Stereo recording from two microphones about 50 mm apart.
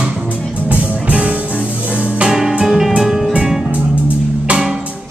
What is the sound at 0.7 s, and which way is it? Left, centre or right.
Music, right.